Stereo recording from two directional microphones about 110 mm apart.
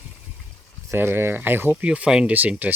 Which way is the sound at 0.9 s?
20° right (ahead or behind).